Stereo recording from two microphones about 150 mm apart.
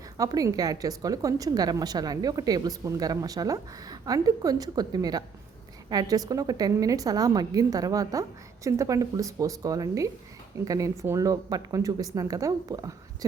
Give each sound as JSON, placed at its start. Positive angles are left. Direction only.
{"t": 0.2, "sound": "a woman's voice", "side_deg": -25}